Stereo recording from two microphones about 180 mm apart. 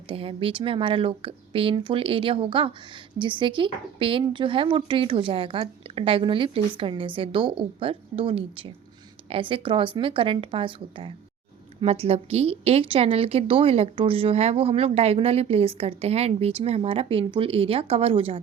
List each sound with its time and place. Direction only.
0.1 s a woman's voice: 30° right (ahead or behind)